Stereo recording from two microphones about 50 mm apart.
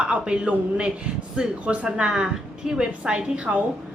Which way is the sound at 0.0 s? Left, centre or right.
Right.